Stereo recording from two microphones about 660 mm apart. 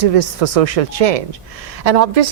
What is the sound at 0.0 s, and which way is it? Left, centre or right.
Speech, right.